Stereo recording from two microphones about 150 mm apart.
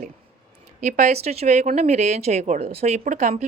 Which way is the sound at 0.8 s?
50° right (ahead or behind).